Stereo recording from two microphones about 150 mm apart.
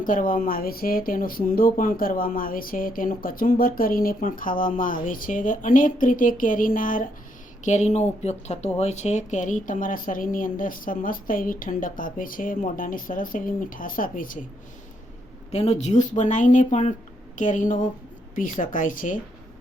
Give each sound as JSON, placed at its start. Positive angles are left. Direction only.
{"t": 0.0, "sound": "speech", "side_deg": 65}
{"t": 7.6, "sound": "speech", "side_deg": 50}
{"t": 15.5, "sound": "speech", "side_deg": 45}